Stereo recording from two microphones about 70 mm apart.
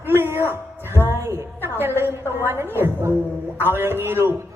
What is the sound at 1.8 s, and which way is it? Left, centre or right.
A woman's voice, right.